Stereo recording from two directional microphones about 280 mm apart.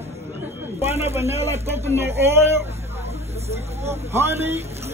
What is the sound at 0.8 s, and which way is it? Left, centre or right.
Speech, centre.